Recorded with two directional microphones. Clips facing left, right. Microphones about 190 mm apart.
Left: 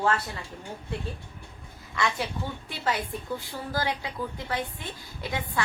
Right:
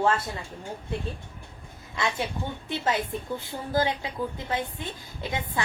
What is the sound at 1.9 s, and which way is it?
A woman's voice, 25° right (ahead or behind).